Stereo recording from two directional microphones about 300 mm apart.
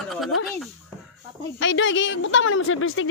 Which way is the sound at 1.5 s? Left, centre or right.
Left.